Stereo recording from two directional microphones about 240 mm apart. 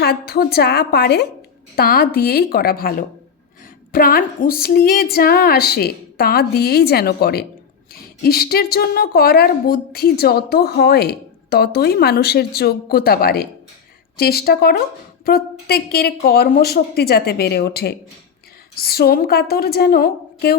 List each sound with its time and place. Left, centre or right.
0.0 s a woman's voice: left
3.9 s a woman's voice: left